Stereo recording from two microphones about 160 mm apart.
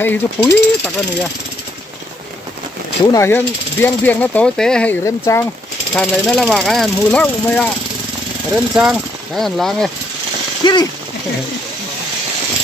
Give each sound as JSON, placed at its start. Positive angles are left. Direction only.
{"t": 0.0, "sound": "speech", "side_deg": 10}
{"t": 3.1, "sound": "speech", "side_deg": 15}
{"t": 5.0, "sound": "speech", "side_deg": 20}
{"t": 5.9, "sound": "speech", "side_deg": 5}
{"t": 8.7, "sound": "speech", "side_deg": 0}
{"t": 10.6, "sound": "speech", "side_deg": 25}